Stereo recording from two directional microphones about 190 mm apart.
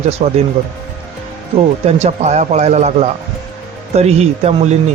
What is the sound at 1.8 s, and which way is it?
Speech, 35° right (ahead or behind).